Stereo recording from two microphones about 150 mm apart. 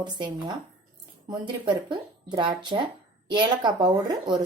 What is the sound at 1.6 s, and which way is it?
Speech, 30° right (ahead or behind).